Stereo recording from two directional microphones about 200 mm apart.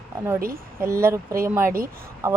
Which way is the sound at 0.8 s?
15° right (ahead or behind).